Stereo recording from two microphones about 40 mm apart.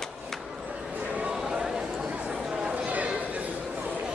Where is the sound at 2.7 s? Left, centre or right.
Right.